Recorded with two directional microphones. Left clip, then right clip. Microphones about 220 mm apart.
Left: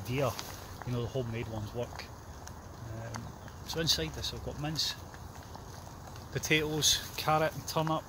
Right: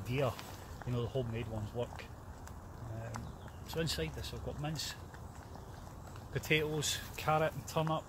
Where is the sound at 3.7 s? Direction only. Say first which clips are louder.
Left 6 dB; 15° left (ahead or behind).